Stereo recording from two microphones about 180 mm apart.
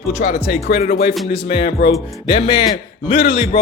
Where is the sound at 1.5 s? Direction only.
35° left (ahead or behind).